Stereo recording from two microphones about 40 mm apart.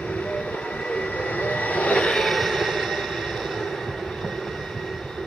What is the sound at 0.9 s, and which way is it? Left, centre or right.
Vehicle, left.